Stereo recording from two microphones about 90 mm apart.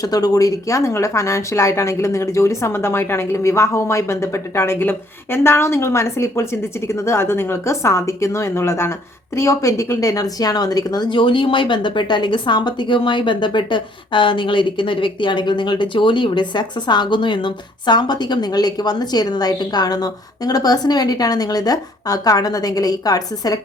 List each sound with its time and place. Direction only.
0.0 s speech: 45° left (ahead or behind)